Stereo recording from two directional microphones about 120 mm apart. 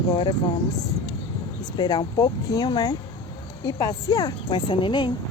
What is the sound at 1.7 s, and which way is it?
A woman's voice, 35° left (ahead or behind).